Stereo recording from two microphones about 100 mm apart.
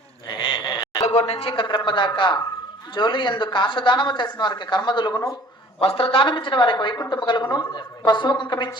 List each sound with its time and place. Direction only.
0.3 s sheep: 50° left (ahead or behind)
1.0 s speech: 85° left; by 5.2 s 45° left (ahead or behind)
5.8 s speech: 70° left (ahead or behind); by 8.8 s 45° left (ahead or behind)